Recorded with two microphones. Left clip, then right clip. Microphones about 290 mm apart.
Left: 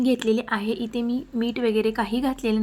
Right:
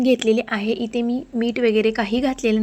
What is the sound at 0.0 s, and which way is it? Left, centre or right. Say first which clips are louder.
A woman's voice: right 5 dB; centre.